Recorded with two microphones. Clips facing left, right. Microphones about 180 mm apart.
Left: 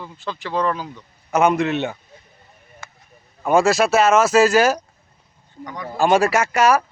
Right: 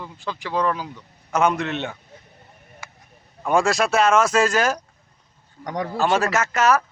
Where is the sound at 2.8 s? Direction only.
10° right (ahead or behind).